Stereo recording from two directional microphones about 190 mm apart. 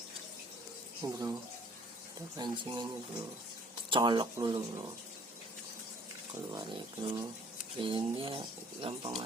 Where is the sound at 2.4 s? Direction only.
25° right (ahead or behind).